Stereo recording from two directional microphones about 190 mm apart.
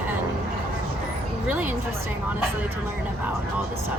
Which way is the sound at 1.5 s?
10° right (ahead or behind).